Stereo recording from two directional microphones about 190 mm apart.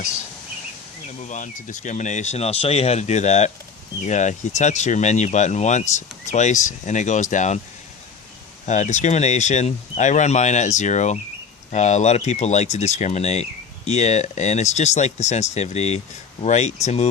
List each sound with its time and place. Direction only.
1.3 s speech: 40° left (ahead or behind)
8.6 s speech: 40° left (ahead or behind)